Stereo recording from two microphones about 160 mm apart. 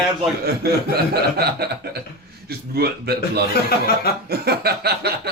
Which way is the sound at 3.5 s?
75° left (ahead or behind).